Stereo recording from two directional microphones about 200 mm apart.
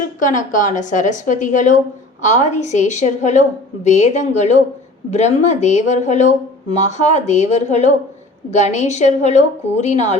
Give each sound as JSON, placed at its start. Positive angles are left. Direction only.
{"t": 0.2, "sound": "speech", "side_deg": 40}